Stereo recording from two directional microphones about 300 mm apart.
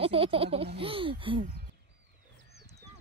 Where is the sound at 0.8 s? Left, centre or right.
Centre.